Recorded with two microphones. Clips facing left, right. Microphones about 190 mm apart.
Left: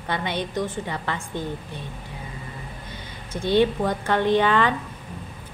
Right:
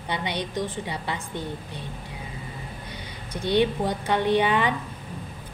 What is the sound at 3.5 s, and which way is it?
A woman's voice, 15° right (ahead or behind).